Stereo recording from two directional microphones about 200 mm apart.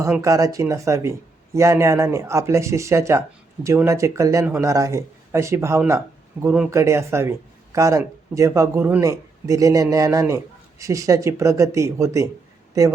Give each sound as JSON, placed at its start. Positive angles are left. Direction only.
{"t": 0.0, "sound": "speech", "side_deg": -15}